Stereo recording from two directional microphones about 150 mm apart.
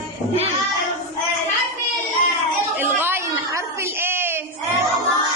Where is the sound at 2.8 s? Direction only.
15° right (ahead or behind).